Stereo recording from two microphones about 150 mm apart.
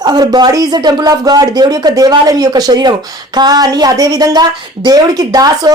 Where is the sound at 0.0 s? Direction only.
25° right (ahead or behind).